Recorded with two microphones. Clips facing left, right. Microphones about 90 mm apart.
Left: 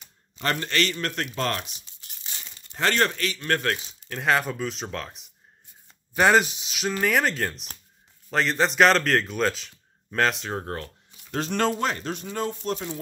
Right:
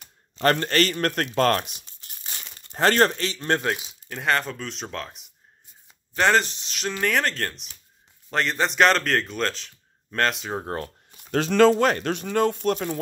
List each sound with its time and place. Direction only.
0.0 s speech: 55° right (ahead or behind)
2.6 s crumpling: 40° right (ahead or behind)
3.2 s speech: 30° right (ahead or behind)
3.7 s a man's voice: 5° right (ahead or behind)
11.3 s speech: 90° right; by 13.0 s 65° right (ahead or behind)